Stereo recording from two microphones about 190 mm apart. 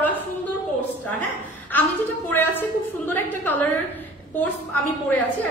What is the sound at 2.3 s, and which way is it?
A woman's voice, 10° left (ahead or behind).